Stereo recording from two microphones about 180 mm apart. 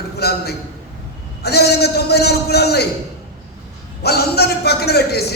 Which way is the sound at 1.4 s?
65° left (ahead or behind).